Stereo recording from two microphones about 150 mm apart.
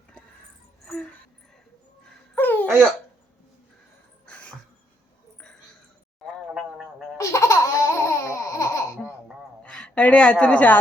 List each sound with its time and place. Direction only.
2.3 s babbling: 10° left (ahead or behind)
4.3 s a sound: 5° left (ahead or behind)
7.2 s laughter: 20° left (ahead or behind)
9.6 s a woman's voice: 5° left (ahead or behind)